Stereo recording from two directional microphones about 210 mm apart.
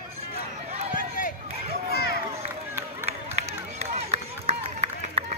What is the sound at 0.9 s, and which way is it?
Run, 40° left (ahead or behind).